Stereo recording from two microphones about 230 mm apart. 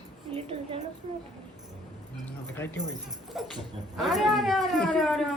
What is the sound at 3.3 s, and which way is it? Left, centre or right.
Speech, centre.